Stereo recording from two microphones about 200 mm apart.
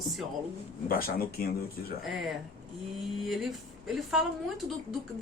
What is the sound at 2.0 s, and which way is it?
A woman's voice, centre (ahead or behind).